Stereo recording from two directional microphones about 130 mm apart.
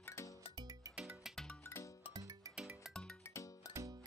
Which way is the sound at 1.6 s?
20° left (ahead or behind).